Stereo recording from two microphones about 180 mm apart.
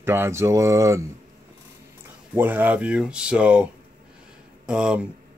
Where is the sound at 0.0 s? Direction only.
15° right (ahead or behind).